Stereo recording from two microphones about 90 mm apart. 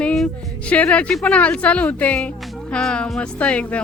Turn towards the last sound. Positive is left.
turn(degrees=15)  # may be behind; listen again after turning